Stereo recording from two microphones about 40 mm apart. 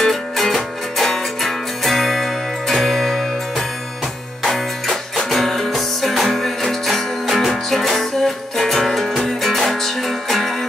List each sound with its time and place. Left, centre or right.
0.0 s music: centre